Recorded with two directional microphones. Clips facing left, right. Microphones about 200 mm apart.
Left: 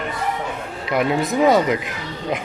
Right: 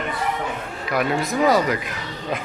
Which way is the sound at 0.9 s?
20° left (ahead or behind).